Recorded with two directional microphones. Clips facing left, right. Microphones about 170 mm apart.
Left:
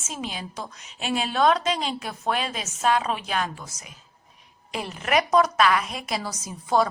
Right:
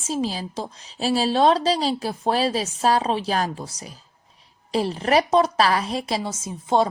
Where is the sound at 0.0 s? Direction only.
35° right (ahead or behind).